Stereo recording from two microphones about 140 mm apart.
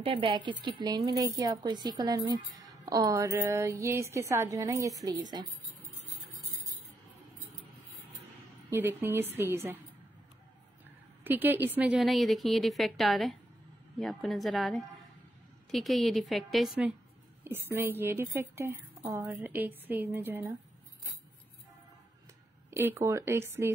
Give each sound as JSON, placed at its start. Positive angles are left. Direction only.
{"t": 0.0, "sound": "a woman's voice", "side_deg": -40}
{"t": 8.6, "sound": "a woman's voice", "side_deg": -15}
{"t": 11.2, "sound": "a woman's voice", "side_deg": -15}
{"t": 17.4, "sound": "a woman's voice", "side_deg": -15}
{"t": 22.7, "sound": "a woman's voice", "side_deg": -20}